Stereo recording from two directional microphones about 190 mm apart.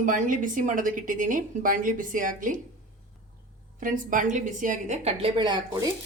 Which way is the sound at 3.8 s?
45° right (ahead or behind).